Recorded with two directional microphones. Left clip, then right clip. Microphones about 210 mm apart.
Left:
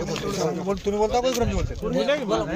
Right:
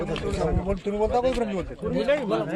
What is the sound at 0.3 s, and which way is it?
Speech, 40° left (ahead or behind).